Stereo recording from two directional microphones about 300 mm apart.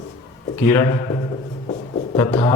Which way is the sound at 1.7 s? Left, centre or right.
Centre.